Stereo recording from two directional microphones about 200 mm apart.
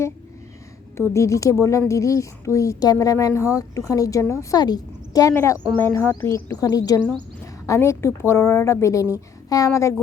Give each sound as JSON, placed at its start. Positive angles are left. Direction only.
{"t": 1.1, "sound": "speech", "side_deg": 15}
{"t": 7.0, "sound": "speech", "side_deg": 5}